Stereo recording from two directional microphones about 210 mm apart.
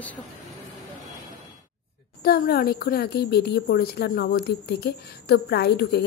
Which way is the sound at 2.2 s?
45° left (ahead or behind).